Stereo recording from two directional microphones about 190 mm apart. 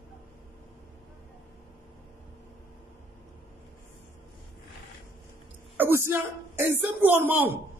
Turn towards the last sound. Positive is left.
turn(degrees=-10)  # may be behind; listen again after turning